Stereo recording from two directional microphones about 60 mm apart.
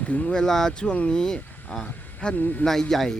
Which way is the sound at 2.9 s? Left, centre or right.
Centre.